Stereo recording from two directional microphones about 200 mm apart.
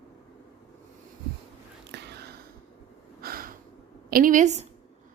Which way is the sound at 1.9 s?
60° right (ahead or behind).